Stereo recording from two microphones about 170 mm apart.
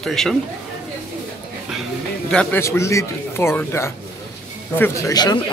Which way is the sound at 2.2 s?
5° left (ahead or behind).